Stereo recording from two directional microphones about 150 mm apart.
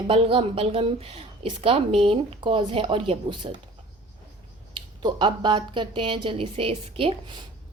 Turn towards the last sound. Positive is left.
turn(degrees=-40)  # may be behind; listen again after turning